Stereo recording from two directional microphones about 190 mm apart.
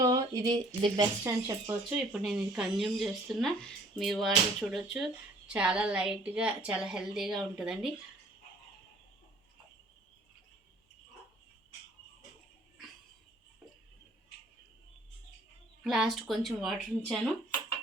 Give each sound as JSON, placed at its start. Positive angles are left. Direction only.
{"t": 0.0, "sound": "speech", "side_deg": -20}
{"t": 1.9, "sound": "a woman's voice", "side_deg": -5}
{"t": 15.8, "sound": "a woman's voice", "side_deg": -5}